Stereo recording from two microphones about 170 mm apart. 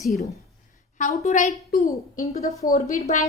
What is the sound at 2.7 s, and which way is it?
Speech, 45° left (ahead or behind).